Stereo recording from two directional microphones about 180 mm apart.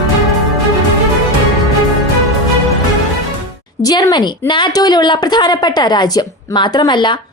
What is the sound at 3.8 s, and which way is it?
A woman's voice, 20° left (ahead or behind).